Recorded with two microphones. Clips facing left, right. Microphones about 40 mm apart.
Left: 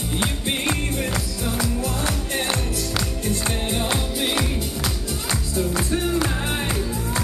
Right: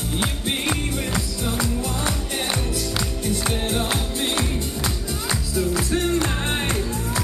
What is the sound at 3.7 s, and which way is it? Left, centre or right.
Music, centre.